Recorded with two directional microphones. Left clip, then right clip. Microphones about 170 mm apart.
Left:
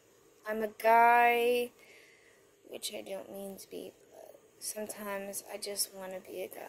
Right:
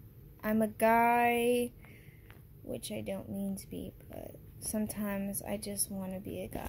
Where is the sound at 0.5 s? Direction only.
5° left (ahead or behind).